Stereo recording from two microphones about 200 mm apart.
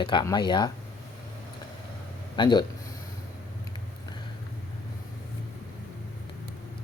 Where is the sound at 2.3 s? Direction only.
20° left (ahead or behind).